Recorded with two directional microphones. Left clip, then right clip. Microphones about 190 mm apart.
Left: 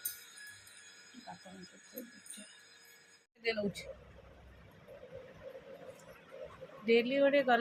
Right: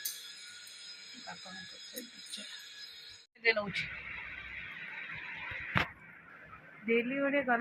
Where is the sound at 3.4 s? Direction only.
10° left (ahead or behind).